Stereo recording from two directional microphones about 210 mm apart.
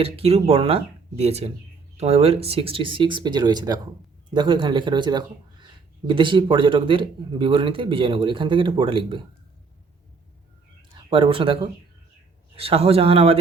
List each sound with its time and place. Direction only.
0.0 s speech: 30° right (ahead or behind)
11.1 s speech: 25° right (ahead or behind)